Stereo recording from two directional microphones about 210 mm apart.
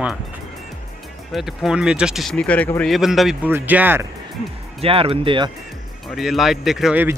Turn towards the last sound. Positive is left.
turn(degrees=-5)  # may be behind; listen again after turning